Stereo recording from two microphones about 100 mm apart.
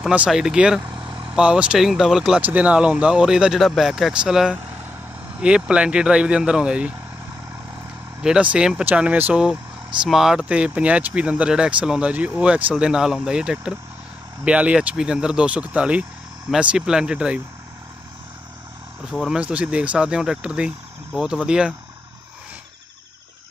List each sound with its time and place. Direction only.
0.0 s speech: 15° right (ahead or behind)
0.8 s vehicle: 50° right (ahead or behind)
1.3 s speech: 10° right (ahead or behind)
8.2 s speech: 10° right (ahead or behind)
19.1 s speech: 5° right (ahead or behind)